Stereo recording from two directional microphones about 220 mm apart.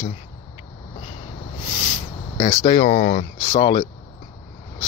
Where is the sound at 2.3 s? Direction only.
30° left (ahead or behind).